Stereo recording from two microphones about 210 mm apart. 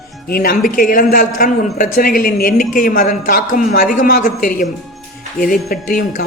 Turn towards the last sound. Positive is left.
turn(degrees=45)  # may be behind; listen again after turning